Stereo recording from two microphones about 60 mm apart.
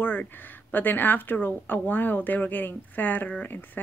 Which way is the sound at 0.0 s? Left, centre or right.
Left.